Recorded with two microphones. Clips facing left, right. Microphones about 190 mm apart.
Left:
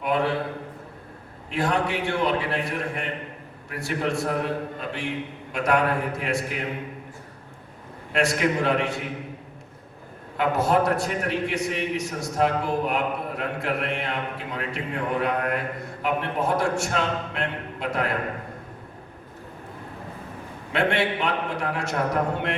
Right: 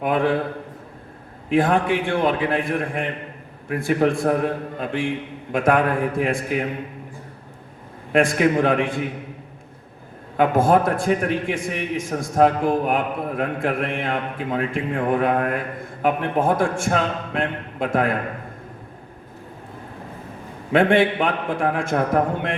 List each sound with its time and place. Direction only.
0.0 s a man's voice: 50° right (ahead or behind)
1.5 s a man's voice: 50° right (ahead or behind)
8.1 s a man's voice: 50° right (ahead or behind)
10.3 s a man's voice: 50° right (ahead or behind)
20.7 s a man's voice: 50° right (ahead or behind)